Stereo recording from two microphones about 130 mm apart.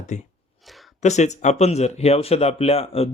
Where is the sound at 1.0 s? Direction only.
60° left (ahead or behind).